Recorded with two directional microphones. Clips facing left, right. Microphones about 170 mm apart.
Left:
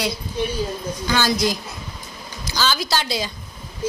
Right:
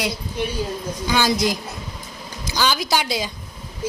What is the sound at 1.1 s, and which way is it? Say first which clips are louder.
A woman's voice: right 1 dB; 15° right (ahead or behind).